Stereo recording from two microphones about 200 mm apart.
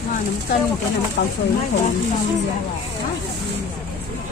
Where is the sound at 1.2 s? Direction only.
55° left (ahead or behind).